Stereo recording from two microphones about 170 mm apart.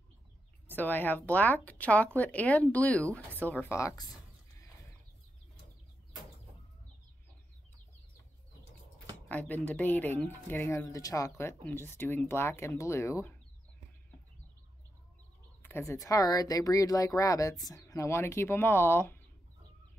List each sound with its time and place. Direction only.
0.7 s speech: 10° left (ahead or behind)
9.3 s speech: 10° left (ahead or behind)
15.6 s speech: 15° left (ahead or behind)